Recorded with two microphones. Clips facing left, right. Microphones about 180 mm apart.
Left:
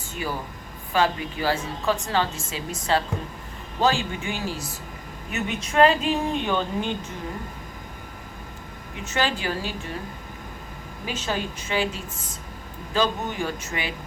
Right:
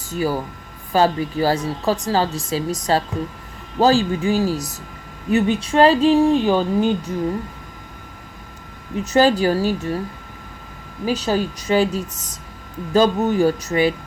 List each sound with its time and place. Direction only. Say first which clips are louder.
0.1 s speech: right 9 dB; 40° right (ahead or behind)
9.0 s speech: right 11 dB; 40° right (ahead or behind)
11.0 s speech: right 9 dB; 35° right (ahead or behind)